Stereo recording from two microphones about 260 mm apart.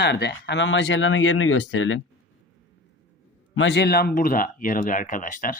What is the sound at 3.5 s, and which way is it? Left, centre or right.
Speech, left.